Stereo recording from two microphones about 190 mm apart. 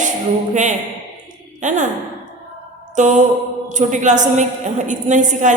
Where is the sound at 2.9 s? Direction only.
40° right (ahead or behind).